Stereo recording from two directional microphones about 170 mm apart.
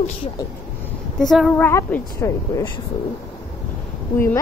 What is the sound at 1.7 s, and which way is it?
A woman's voice, 10° left (ahead or behind).